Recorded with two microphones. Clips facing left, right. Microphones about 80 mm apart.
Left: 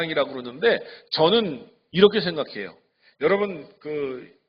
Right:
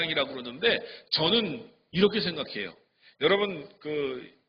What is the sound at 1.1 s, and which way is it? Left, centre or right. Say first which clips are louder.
A man's voice: left 8 dB; left.